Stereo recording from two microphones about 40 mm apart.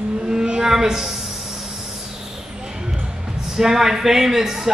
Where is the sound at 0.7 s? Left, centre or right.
Centre.